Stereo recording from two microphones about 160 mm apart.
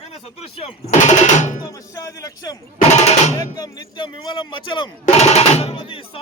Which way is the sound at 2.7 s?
45° left (ahead or behind).